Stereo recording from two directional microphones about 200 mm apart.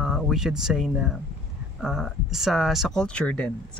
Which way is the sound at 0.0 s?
Centre (ahead or behind).